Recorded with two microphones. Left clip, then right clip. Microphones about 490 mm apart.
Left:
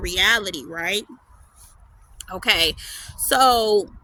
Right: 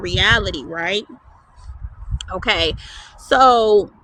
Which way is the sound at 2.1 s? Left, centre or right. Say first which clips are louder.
Right 1 dB; left.